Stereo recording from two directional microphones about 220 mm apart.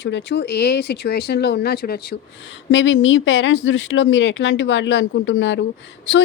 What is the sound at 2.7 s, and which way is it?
Speech, 60° left (ahead or behind).